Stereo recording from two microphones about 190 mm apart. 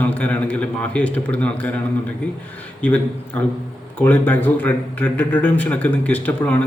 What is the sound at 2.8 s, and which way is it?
Speech, 5° left (ahead or behind).